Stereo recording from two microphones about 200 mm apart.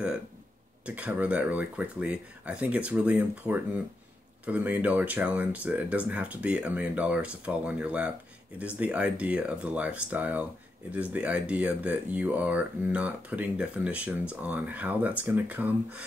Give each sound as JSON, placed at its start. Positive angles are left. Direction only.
{"t": 0.8, "sound": "speech", "side_deg": -5}